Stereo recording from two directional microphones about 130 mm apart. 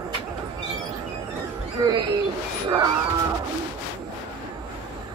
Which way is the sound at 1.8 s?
30° right (ahead or behind).